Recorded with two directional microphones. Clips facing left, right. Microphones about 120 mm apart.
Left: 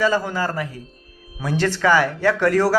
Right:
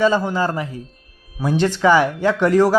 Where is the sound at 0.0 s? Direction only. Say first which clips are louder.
Right 3 dB; 20° right (ahead or behind).